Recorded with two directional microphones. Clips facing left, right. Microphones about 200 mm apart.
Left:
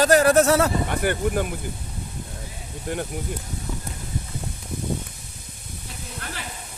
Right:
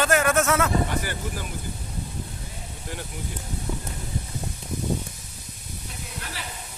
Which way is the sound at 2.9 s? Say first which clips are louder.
Left 8 dB; 50° left (ahead or behind).